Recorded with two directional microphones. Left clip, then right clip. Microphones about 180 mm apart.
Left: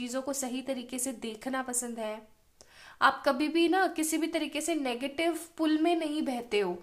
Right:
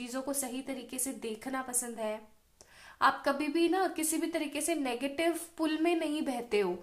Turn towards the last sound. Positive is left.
turn(degrees=20)  # may be behind; listen again after turning